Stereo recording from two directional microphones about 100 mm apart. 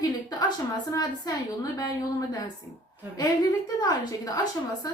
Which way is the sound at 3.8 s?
40° left (ahead or behind).